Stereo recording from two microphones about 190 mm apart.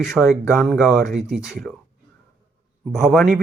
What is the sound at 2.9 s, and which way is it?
Speech, centre (ahead or behind).